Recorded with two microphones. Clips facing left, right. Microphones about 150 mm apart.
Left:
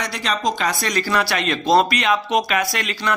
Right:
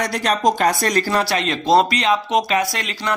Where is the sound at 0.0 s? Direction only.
45° right (ahead or behind).